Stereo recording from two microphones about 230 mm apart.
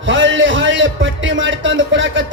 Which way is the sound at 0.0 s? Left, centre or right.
Right.